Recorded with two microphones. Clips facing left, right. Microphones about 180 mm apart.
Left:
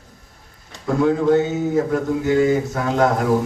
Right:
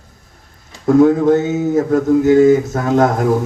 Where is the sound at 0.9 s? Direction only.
45° right (ahead or behind).